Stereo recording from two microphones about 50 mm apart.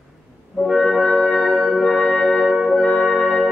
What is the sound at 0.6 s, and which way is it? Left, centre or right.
Music, centre.